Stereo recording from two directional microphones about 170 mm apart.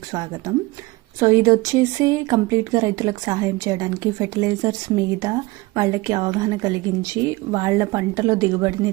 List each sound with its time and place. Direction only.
0.1 s speech: 20° right (ahead or behind)